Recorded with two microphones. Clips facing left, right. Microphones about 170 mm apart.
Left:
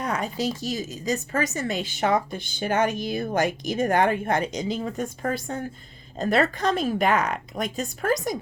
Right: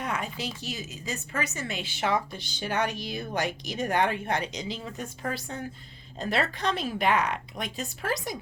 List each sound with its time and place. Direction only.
0.0 s speech: 40° left (ahead or behind)